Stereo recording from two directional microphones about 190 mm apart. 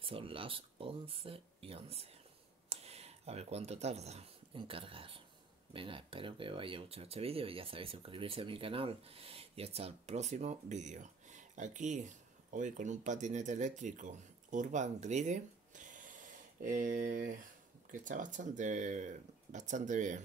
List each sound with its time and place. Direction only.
0.0 s speech: 30° right (ahead or behind)